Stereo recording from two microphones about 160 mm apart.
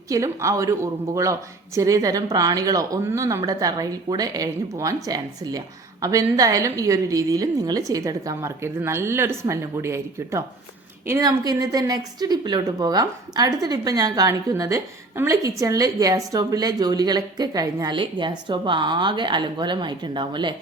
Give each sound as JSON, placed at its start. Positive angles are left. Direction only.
{"t": 0.1, "sound": "a woman's voice", "side_deg": -20}